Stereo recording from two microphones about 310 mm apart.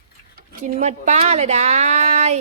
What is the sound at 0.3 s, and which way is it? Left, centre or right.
A woman's voice, right.